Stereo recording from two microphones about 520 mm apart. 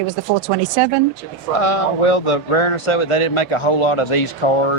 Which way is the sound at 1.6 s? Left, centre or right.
Left.